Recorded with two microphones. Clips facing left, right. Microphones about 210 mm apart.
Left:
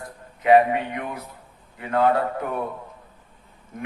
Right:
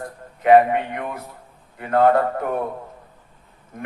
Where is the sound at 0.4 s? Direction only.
50° right (ahead or behind).